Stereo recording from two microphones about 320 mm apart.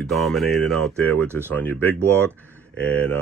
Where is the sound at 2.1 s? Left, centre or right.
Centre.